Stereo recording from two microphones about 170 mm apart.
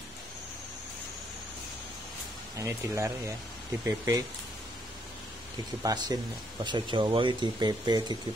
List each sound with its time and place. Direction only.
2.5 s speech: 15° right (ahead or behind)
5.8 s speech: 20° right (ahead or behind)